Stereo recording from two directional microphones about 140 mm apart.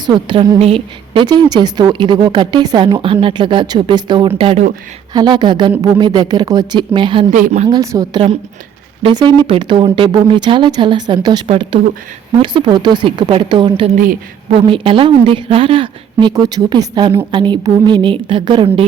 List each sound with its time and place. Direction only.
0.0 s a woman's voice: 35° right (ahead or behind)
7.3 s speech: 60° right (ahead or behind)
7.7 s a woman's voice: 30° right (ahead or behind)
16.3 s a woman's voice: 25° right (ahead or behind)